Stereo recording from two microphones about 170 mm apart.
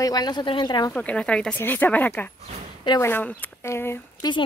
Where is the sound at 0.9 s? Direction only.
10° left (ahead or behind).